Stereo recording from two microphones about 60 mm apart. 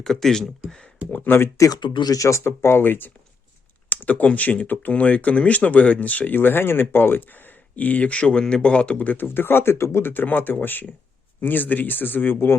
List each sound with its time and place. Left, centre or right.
0.0 s speech: centre
1.1 s speech: left
1.5 s speech: left
2.4 s speech: left
3.8 s speech: left
7.8 s speech: left